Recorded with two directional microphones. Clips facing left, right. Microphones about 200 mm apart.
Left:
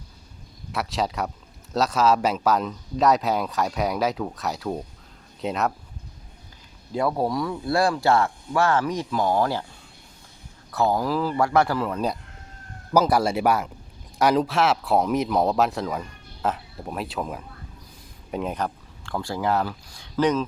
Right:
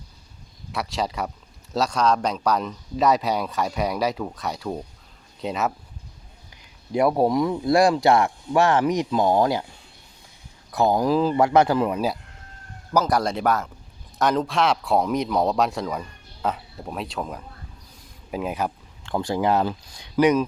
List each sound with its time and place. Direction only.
0.7 s speech: centre (ahead or behind)
6.9 s speech: 20° right (ahead or behind)
10.7 s speech: 15° right (ahead or behind)
11.9 s speech: 5° right (ahead or behind)
12.9 s speech: 5° left (ahead or behind)
19.0 s speech: 20° right (ahead or behind)